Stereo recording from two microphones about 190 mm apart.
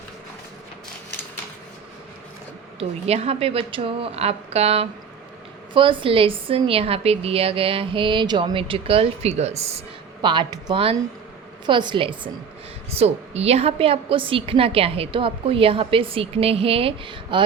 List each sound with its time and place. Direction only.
2.7 s a woman's voice: 35° right (ahead or behind)